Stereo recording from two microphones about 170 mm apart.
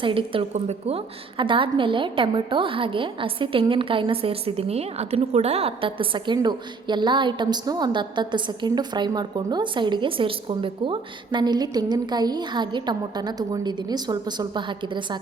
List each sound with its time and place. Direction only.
0.0 s a woman's voice: 30° right (ahead or behind)